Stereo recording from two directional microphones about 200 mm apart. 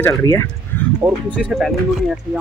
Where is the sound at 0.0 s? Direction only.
15° left (ahead or behind).